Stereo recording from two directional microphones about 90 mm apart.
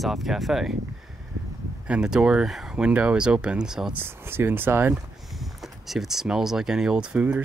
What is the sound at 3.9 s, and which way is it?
Speech, 25° right (ahead or behind).